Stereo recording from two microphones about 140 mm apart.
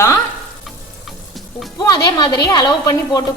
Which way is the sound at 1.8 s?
30° left (ahead or behind).